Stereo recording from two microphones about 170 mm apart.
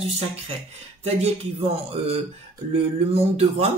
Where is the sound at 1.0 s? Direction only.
35° right (ahead or behind).